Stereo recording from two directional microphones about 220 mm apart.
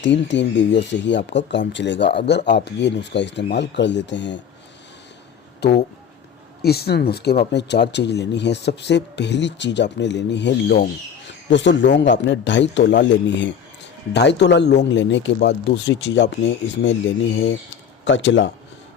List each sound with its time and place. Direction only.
0.0 s speech: 55° left (ahead or behind)
5.6 s a man's voice: 50° left (ahead or behind)